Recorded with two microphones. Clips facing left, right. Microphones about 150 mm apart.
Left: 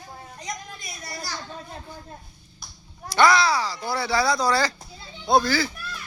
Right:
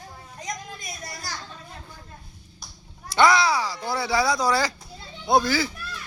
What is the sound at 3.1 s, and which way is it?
Speech, 20° right (ahead or behind).